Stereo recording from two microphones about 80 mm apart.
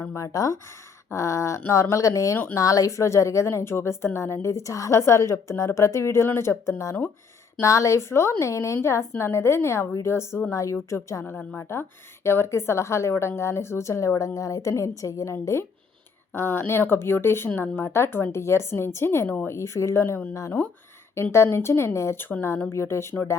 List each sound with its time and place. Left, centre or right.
0.0 s a woman's voice: left
0.3 s a woman's voice: left
21.3 s a woman's voice: left